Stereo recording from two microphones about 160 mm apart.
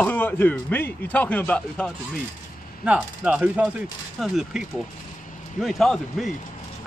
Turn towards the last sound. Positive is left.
turn(degrees=0)  # may be behind; listen again after turning